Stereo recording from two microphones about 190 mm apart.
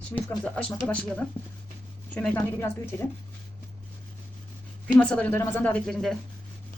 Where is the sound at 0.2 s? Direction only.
5° left (ahead or behind).